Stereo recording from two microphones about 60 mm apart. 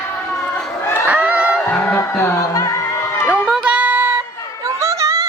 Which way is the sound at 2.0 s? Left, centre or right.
Left.